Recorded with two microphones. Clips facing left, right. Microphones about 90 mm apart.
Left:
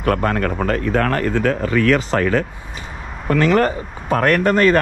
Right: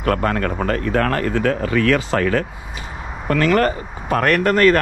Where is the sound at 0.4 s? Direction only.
45° right (ahead or behind).